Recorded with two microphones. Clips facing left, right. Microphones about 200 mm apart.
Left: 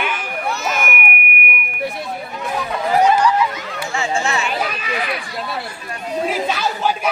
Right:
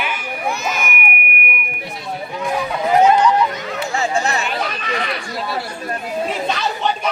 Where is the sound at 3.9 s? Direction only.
40° right (ahead or behind).